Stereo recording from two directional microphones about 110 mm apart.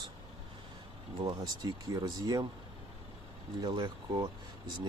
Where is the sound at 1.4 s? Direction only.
35° right (ahead or behind).